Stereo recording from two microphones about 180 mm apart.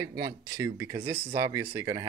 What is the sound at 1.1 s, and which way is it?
Speech, 30° right (ahead or behind).